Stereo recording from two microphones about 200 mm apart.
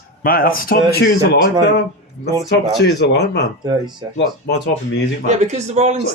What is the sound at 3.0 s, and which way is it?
Speech, 55° left (ahead or behind).